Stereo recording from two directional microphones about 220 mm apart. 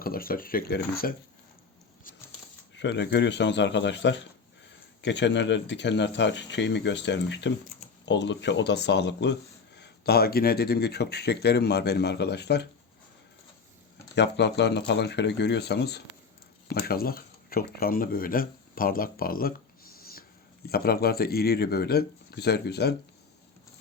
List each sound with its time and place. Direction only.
0.0 s speech: 40° left (ahead or behind)
2.7 s speech: 50° left (ahead or behind)
14.2 s speech: 50° left (ahead or behind)
20.0 s a sound: 45° left (ahead or behind)
20.7 s speech: 45° left (ahead or behind)